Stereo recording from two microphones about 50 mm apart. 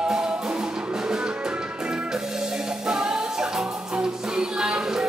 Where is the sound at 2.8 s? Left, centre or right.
Centre.